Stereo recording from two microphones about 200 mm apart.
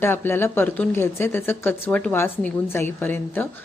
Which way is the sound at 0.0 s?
10° left (ahead or behind).